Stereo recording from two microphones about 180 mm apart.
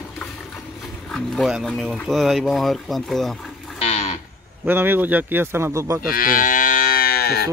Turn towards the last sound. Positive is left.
turn(degrees=60)  # may be behind; listen again after turning